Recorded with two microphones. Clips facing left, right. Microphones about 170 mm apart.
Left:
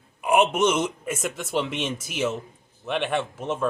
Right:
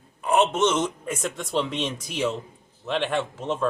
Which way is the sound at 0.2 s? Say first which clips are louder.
Left 1 dB; 10° left (ahead or behind).